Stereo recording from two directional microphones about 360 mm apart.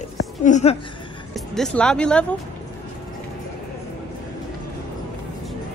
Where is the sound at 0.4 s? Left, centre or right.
Centre.